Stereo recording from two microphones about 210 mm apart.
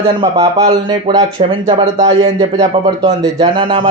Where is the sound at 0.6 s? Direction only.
25° right (ahead or behind).